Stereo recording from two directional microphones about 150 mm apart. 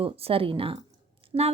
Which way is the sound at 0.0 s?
40° right (ahead or behind).